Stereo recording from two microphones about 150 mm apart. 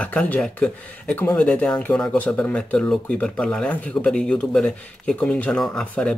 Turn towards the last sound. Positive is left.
turn(degrees=5)  # may be behind; listen again after turning